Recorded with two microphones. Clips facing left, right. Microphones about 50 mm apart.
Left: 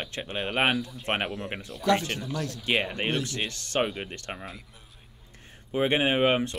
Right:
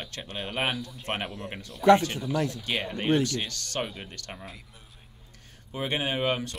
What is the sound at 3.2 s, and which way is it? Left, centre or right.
Speech, left.